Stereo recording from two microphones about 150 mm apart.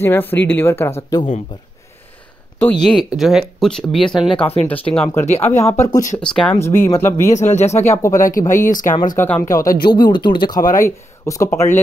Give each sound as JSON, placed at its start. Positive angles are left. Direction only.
{"t": 0.0, "sound": "speech", "side_deg": 15}
{"t": 2.6, "sound": "speech", "side_deg": 5}
{"t": 4.4, "sound": "speech", "side_deg": 40}
{"t": 5.6, "sound": "speech", "side_deg": 20}
{"t": 6.1, "sound": "speech", "side_deg": 5}
{"t": 6.5, "sound": "speech", "side_deg": 15}
{"t": 7.3, "sound": "speech", "side_deg": 50}
{"t": 7.8, "sound": "speech", "side_deg": 20}
{"t": 8.2, "sound": "speech", "side_deg": 65}
{"t": 9.2, "sound": "speech", "side_deg": 15}
{"t": 9.7, "sound": "speech", "side_deg": 90}
{"t": 9.9, "sound": "speech", "side_deg": 30}
{"t": 10.8, "sound": "speech", "side_deg": 20}